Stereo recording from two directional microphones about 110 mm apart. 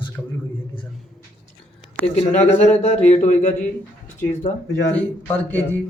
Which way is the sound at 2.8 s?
90° left.